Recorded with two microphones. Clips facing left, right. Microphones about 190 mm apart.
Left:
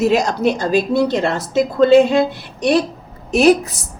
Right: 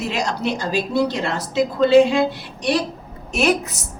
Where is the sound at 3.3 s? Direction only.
35° left (ahead or behind).